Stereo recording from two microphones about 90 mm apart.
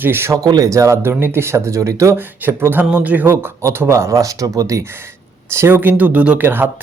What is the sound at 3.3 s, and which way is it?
Speech, 30° right (ahead or behind).